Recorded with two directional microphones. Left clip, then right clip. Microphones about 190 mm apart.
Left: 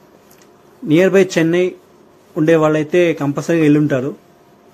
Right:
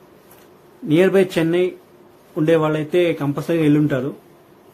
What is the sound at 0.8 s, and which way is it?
A man's voice, 20° left (ahead or behind).